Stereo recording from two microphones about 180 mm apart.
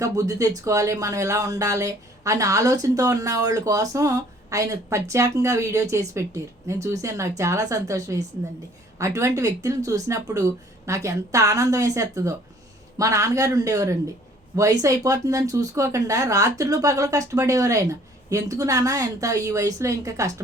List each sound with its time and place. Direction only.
0.0 s speech: 20° right (ahead or behind)